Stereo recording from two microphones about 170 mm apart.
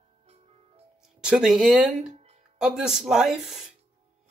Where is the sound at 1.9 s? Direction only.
40° right (ahead or behind).